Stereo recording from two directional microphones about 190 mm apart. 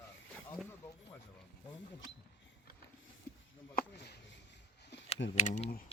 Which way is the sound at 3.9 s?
60° left (ahead or behind).